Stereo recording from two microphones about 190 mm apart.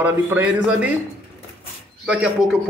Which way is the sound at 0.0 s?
10° right (ahead or behind).